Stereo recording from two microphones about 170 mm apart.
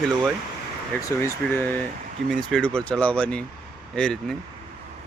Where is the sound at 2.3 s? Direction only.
5° left (ahead or behind).